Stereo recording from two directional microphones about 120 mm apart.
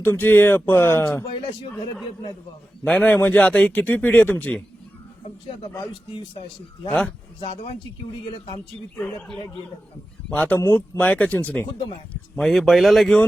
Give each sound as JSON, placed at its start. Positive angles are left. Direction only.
{"t": 0.0, "sound": "speech", "side_deg": 15}
{"t": 2.8, "sound": "speech", "side_deg": 10}
{"t": 7.4, "sound": "a man's voice", "side_deg": 55}
{"t": 9.0, "sound": "speech", "side_deg": 5}
{"t": 12.4, "sound": "speech", "side_deg": 0}